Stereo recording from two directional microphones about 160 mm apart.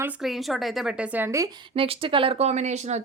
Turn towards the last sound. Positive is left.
turn(degrees=-45)  # may be behind; listen again after turning